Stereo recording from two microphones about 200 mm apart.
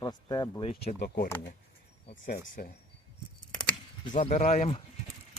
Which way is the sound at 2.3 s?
50° left (ahead or behind).